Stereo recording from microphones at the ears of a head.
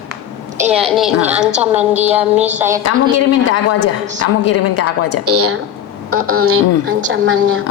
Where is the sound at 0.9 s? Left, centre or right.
Left.